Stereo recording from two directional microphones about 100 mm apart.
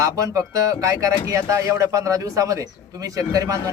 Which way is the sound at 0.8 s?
30° right (ahead or behind).